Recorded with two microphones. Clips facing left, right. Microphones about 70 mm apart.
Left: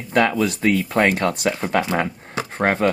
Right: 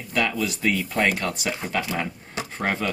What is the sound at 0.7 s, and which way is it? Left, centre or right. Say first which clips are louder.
Speech: left 5 dB; left.